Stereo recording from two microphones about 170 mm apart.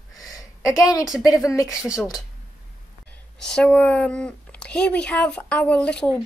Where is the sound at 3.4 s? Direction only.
5° left (ahead or behind).